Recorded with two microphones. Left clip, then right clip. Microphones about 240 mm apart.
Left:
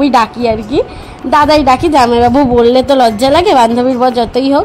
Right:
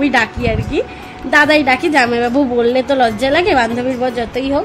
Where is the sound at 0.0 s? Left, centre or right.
Left.